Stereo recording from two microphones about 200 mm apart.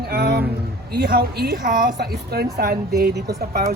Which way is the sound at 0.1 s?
55° right (ahead or behind).